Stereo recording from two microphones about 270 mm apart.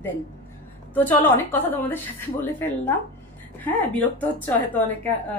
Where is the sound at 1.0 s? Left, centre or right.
Centre.